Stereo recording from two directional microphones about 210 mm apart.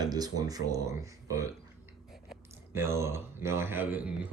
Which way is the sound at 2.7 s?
10° right (ahead or behind).